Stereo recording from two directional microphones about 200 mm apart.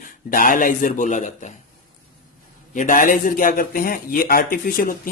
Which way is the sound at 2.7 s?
40° left (ahead or behind).